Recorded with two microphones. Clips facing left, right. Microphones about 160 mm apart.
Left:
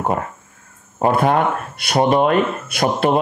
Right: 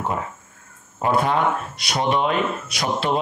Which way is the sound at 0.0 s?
50° left (ahead or behind).